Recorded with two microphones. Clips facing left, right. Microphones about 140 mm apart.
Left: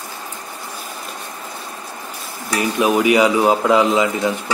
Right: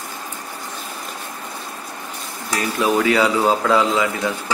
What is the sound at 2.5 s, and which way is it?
Speech, 15° left (ahead or behind).